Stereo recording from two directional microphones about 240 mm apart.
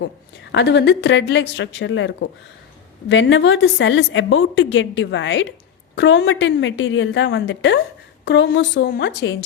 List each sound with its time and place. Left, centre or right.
0.5 s a woman's voice: left